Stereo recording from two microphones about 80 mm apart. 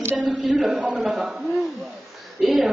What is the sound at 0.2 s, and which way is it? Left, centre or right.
A woman's voice, centre.